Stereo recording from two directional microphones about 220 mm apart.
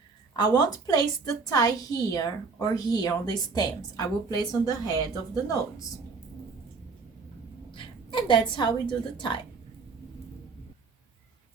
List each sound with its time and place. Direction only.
0.3 s a woman's voice: 15° left (ahead or behind)
7.7 s a sound: 20° left (ahead or behind)
9.1 s a woman's voice: 20° left (ahead or behind)